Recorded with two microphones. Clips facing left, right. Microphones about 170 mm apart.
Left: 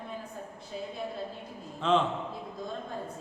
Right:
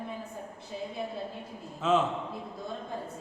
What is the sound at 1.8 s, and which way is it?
Speech, 5° right (ahead or behind).